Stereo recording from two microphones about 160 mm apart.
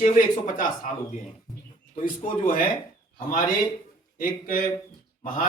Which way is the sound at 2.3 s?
60° left (ahead or behind).